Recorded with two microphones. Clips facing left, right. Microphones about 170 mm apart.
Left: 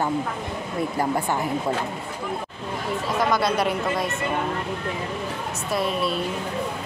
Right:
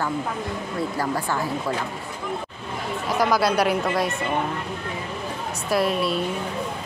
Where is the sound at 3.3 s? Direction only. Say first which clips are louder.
Right 4 dB; centre (ahead or behind).